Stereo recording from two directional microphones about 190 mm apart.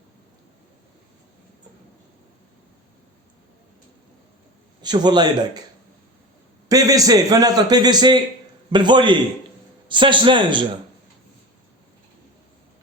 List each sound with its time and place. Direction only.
4.8 s a man's voice: 20° right (ahead or behind)
6.7 s a man's voice: 20° right (ahead or behind)